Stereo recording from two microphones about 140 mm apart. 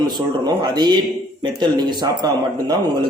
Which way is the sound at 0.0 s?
30° right (ahead or behind).